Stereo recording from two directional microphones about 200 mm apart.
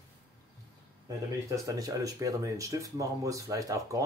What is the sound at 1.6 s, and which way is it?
Speech, 15° right (ahead or behind).